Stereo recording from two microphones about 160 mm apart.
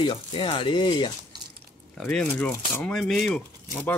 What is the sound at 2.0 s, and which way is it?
Speech, 5° left (ahead or behind).